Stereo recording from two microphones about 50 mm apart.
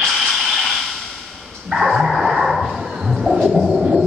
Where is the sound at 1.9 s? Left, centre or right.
Centre.